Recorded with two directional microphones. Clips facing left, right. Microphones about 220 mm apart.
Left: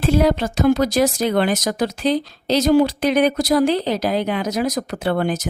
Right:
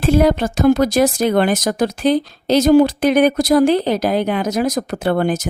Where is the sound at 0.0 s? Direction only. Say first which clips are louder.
Right 3 dB; 50° right (ahead or behind).